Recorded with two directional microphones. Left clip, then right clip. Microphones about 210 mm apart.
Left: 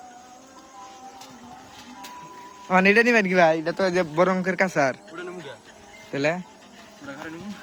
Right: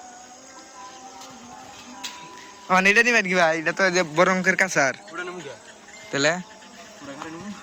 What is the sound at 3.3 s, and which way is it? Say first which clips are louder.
Speech: left 1 dB; 15° left (ahead or behind).